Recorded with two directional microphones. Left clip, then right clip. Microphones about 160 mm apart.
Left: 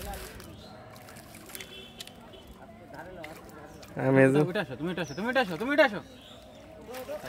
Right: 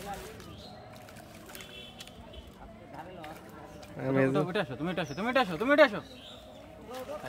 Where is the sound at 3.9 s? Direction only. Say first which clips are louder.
Left 6 dB; 55° left (ahead or behind).